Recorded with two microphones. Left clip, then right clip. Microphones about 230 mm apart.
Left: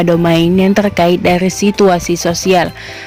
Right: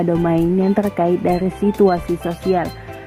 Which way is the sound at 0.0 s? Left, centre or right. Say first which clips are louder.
Left 6 dB; left.